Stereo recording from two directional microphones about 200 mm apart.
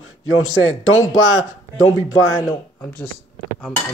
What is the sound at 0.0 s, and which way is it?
A man's voice, 90° left.